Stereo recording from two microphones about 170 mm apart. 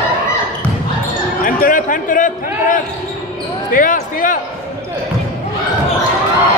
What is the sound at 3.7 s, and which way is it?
Basketball bounce, 50° left (ahead or behind).